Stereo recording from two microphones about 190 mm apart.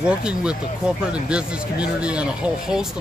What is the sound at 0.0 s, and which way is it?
A man's voice, 5° right (ahead or behind).